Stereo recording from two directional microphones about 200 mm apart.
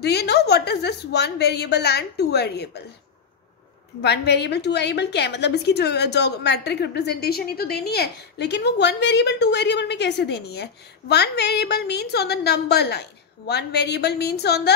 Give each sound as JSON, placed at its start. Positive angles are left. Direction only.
{"t": 0.0, "sound": "a woman's voice", "side_deg": 55}
{"t": 4.0, "sound": "a woman's voice", "side_deg": 55}